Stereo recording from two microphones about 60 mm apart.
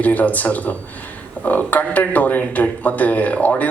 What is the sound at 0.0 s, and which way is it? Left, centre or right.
Speech, left.